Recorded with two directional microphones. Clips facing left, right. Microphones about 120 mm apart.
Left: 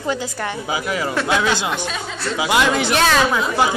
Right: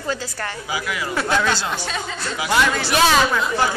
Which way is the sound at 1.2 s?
10° left (ahead or behind).